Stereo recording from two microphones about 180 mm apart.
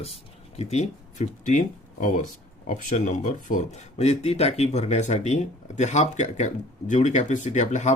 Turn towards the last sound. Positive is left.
turn(degrees=40)  # may be behind; listen again after turning